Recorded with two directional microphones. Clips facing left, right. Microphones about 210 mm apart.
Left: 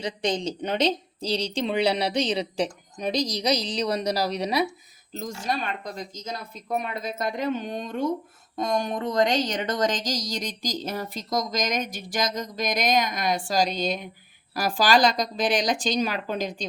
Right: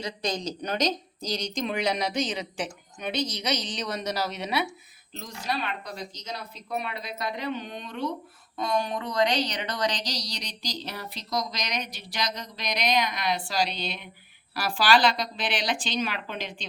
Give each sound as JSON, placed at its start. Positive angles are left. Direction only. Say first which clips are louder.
{"t": 0.0, "sound": "a woman's voice", "louder": "left 4 dB", "side_deg": 30}